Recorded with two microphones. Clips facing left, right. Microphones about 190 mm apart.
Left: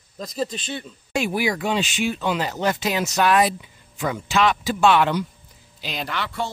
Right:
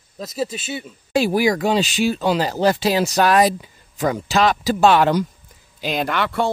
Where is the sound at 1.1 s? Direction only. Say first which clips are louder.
Right 6 dB; 35° right (ahead or behind).